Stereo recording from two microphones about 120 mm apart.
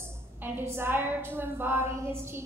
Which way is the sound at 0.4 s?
20° right (ahead or behind).